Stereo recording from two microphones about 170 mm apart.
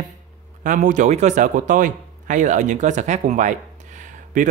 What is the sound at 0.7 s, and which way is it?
Speech, 50° right (ahead or behind).